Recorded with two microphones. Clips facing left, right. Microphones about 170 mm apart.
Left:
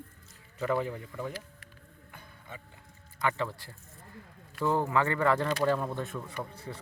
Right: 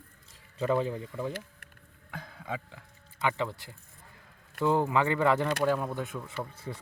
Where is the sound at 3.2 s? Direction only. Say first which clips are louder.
Right 1 dB; 15° right (ahead or behind).